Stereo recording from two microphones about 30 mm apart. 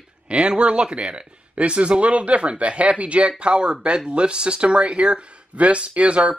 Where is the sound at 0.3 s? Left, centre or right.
Right.